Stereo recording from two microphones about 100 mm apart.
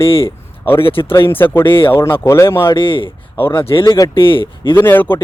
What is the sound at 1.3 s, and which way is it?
A man's voice, 20° left (ahead or behind).